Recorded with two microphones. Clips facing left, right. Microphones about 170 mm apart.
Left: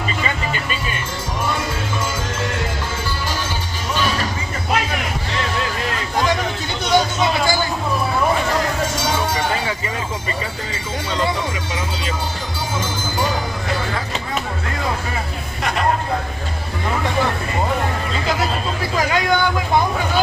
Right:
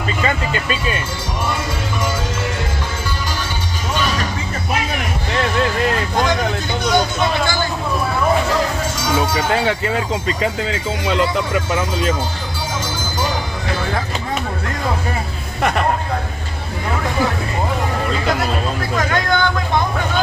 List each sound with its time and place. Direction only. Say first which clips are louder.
6.9 s vehicle: left 1 dB; 5° left (ahead or behind)
9.5 s speech: right 5 dB; 70° right (ahead or behind)
18.9 s a sound: left 1 dB; 5° left (ahead or behind)